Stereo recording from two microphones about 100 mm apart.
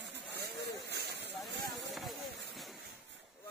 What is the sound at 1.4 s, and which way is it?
Vehicle, centre (ahead or behind).